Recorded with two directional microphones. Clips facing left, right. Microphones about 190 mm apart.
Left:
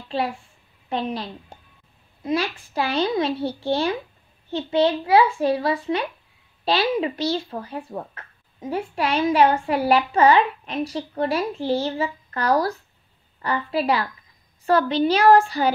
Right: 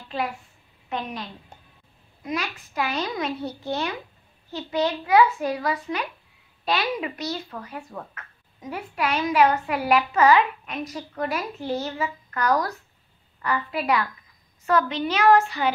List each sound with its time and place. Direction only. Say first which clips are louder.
0.1 s a child's voice: left 3 dB; 30° left (ahead or behind)